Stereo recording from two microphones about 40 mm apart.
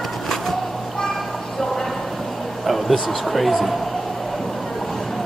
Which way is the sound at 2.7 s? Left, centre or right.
Centre.